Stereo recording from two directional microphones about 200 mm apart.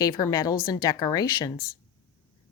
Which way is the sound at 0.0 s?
20° left (ahead or behind).